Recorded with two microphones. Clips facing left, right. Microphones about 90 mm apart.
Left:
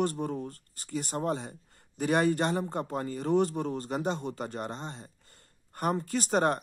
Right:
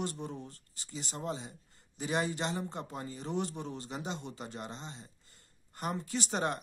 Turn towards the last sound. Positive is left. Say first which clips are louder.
# left 7 dB
turn(degrees=50)  # may be behind; listen again after turning